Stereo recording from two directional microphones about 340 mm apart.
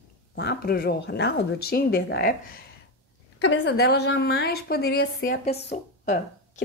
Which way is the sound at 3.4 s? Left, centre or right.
Left.